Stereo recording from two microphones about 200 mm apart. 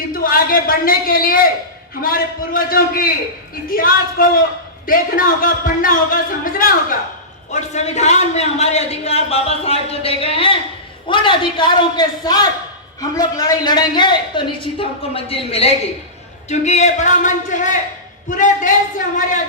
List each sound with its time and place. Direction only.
0.1 s a man's voice: 45° left (ahead or behind)